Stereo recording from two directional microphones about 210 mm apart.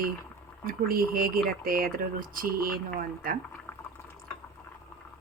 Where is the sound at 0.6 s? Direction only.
45° right (ahead or behind).